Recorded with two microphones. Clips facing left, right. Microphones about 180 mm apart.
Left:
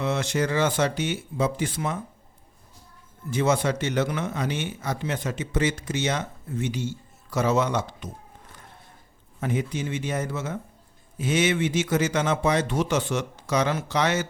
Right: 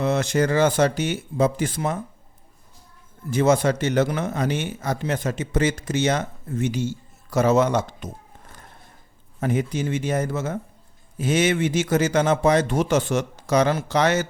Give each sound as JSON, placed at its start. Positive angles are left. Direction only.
{"t": 0.0, "sound": "speech", "side_deg": -40}
{"t": 3.2, "sound": "speech", "side_deg": -45}
{"t": 9.4, "sound": "speech", "side_deg": -40}